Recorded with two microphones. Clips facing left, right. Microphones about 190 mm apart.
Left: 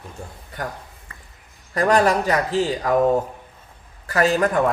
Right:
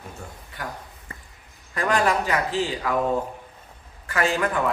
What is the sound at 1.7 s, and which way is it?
Speech, 40° left (ahead or behind).